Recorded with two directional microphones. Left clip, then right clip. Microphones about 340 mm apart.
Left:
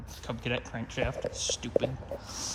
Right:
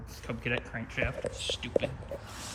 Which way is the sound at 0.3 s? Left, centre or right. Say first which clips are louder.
Even; centre.